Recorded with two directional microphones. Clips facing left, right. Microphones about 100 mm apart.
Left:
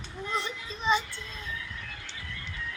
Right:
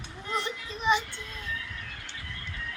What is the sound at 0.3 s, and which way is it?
Children playing, 15° right (ahead or behind).